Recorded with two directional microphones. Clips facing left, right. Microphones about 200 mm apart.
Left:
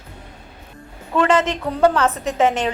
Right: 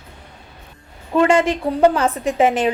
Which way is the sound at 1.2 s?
10° right (ahead or behind).